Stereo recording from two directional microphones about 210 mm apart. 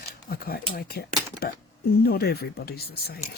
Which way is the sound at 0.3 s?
45° left (ahead or behind).